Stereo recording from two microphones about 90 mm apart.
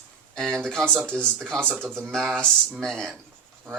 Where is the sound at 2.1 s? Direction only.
5° left (ahead or behind).